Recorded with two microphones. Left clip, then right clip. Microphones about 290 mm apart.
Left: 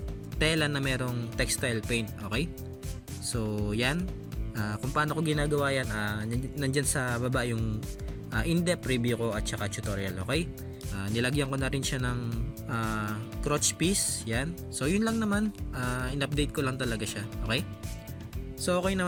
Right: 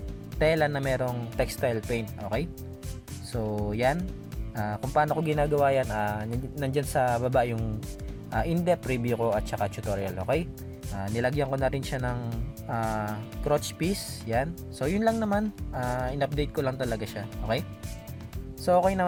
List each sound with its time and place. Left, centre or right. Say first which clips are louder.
0.3 s speech: right 4 dB; centre